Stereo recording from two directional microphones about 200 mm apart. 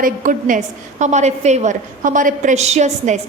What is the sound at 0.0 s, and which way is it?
A woman's voice, 40° right (ahead or behind).